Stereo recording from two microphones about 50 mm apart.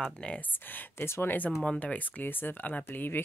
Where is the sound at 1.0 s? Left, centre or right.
Left.